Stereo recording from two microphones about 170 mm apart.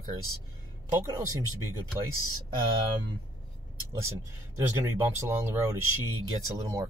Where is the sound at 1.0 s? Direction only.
20° right (ahead or behind).